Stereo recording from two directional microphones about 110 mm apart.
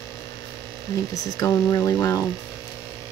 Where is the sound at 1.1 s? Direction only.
30° left (ahead or behind).